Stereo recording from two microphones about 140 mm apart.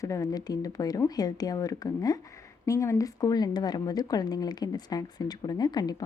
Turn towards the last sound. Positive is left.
turn(degrees=30)  # may be behind; listen again after turning